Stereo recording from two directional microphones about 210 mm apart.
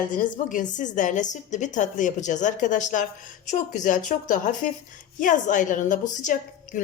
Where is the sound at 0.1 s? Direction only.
40° left (ahead or behind).